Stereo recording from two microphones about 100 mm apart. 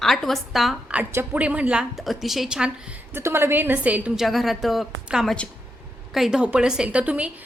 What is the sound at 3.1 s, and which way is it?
A woman's voice, 25° right (ahead or behind).